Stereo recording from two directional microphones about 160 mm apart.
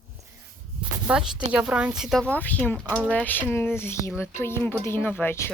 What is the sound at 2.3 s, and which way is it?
Speech, 10° left (ahead or behind).